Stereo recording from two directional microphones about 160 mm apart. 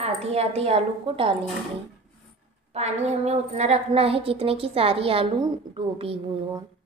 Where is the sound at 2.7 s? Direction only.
40° right (ahead or behind).